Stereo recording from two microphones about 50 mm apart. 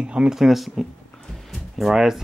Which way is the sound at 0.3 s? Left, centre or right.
Centre.